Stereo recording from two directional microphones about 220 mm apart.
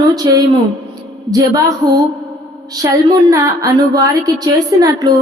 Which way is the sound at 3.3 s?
15° right (ahead or behind).